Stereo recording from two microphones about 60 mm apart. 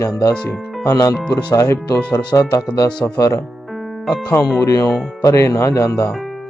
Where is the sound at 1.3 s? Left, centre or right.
Left.